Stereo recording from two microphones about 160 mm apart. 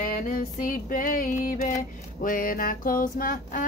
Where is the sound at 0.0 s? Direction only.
65° left (ahead or behind).